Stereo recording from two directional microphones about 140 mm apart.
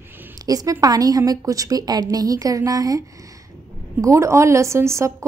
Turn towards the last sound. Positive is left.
turn(degrees=-20)  # may be behind; listen again after turning